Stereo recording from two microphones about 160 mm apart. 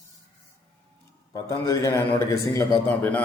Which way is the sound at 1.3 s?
20° left (ahead or behind).